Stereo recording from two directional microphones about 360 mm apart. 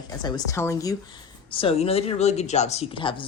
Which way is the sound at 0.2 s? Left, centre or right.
Centre.